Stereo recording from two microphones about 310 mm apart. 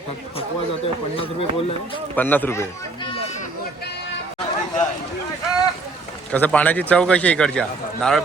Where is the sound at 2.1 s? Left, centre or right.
Centre.